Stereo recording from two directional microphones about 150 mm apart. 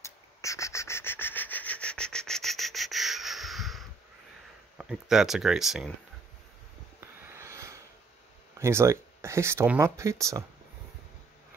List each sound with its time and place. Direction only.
0.0 s owl: 20° left (ahead or behind); by 3.8 s centre (ahead or behind)
4.7 s speech: 5° right (ahead or behind)
7.0 s a sound: 20° right (ahead or behind)
8.5 s speech: 20° right (ahead or behind)